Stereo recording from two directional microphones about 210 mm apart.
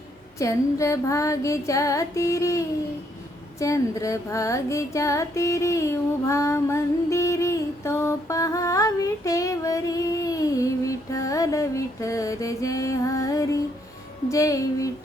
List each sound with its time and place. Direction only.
0.3 s music: 15° left (ahead or behind)